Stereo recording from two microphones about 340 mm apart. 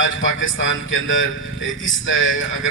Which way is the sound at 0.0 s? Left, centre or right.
Left.